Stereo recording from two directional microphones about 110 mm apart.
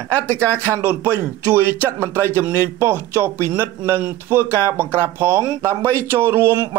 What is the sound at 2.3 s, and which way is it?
Speech, 20° right (ahead or behind).